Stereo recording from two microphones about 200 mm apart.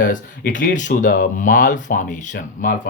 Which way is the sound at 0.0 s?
40° left (ahead or behind).